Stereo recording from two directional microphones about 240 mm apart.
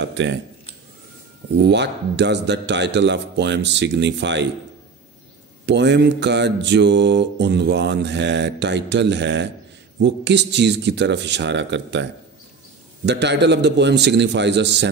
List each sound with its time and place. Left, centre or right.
0.0 s mantra: right
1.6 s mantra: right
5.7 s mantra: right